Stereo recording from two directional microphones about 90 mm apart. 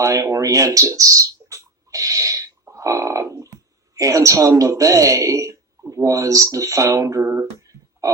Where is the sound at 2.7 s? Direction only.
35° right (ahead or behind).